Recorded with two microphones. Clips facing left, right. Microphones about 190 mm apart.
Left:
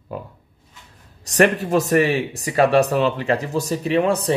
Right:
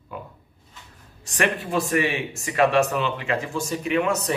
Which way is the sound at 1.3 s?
40° left (ahead or behind).